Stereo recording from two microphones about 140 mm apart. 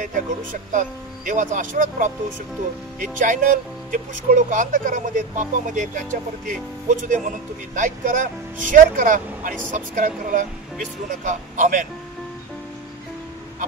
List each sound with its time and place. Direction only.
0.0 s speech: 70° right (ahead or behind)
7.1 s speech: 70° right (ahead or behind)